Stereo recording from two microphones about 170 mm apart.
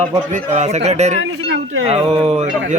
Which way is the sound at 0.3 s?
40° right (ahead or behind).